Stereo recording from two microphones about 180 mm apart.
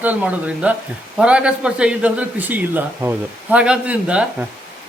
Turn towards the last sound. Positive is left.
turn(degrees=-5)  # may be behind; listen again after turning